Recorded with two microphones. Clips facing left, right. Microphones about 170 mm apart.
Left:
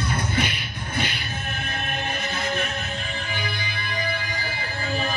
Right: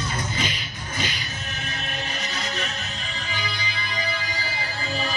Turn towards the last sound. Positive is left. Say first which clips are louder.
# left 2 dB
turn(degrees=55)  # may be behind; listen again after turning